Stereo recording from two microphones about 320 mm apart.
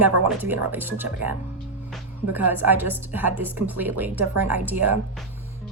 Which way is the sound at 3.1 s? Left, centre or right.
Centre.